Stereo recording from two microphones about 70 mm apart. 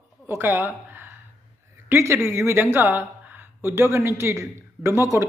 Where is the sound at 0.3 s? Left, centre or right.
Right.